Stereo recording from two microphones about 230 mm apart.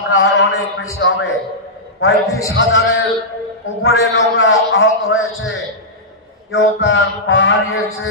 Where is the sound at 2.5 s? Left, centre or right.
Left.